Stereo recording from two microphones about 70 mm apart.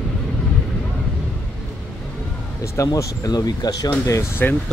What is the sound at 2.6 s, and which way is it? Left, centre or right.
Speech, left.